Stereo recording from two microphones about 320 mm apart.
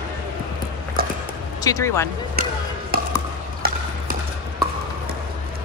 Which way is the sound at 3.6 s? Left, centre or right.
Right.